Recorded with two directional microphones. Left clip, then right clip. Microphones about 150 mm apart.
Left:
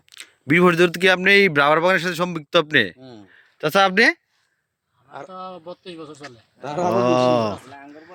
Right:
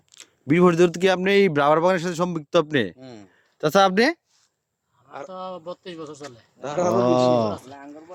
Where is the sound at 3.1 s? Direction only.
35° right (ahead or behind).